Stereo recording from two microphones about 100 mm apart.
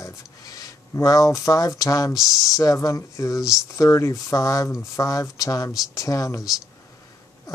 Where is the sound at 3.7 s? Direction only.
30° left (ahead or behind).